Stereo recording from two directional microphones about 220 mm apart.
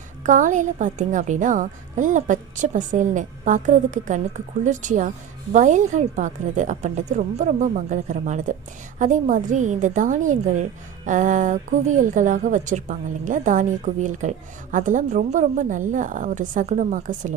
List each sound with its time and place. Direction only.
0.2 s a woman's voice: 35° right (ahead or behind)